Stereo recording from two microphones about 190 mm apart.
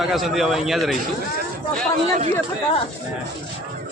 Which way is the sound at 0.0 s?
Centre (ahead or behind).